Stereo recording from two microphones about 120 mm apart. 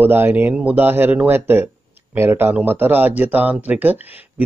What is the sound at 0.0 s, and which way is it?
Speech, 20° right (ahead or behind).